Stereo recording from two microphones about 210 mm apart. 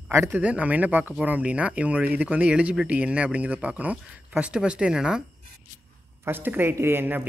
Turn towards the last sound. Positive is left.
turn(degrees=-10)  # may be behind; listen again after turning